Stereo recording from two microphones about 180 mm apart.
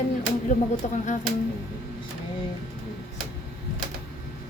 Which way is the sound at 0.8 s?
45° left (ahead or behind).